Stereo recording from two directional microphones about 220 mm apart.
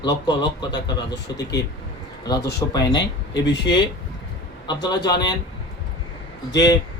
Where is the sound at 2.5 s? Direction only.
15° left (ahead or behind).